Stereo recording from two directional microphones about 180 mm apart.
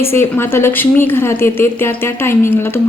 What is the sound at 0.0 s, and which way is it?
A woman's voice, 15° left (ahead or behind).